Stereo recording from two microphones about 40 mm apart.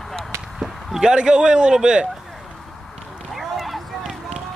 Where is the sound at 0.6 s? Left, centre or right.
Centre.